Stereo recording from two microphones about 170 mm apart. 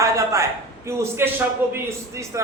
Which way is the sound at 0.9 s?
15° right (ahead or behind).